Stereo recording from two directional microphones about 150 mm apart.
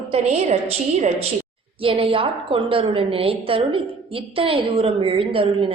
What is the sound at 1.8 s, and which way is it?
A woman's voice, 35° right (ahead or behind).